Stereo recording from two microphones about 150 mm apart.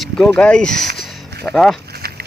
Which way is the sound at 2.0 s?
90° right.